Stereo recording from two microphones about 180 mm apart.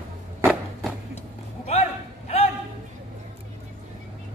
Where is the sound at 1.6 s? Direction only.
35° left (ahead or behind).